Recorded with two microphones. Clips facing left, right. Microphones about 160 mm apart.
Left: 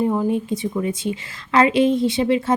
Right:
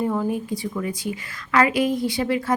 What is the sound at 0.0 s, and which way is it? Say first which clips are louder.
A woman's voice: left 4 dB; 20° left (ahead or behind).